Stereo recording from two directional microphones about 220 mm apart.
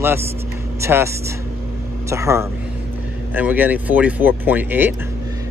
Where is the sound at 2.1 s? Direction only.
10° right (ahead or behind).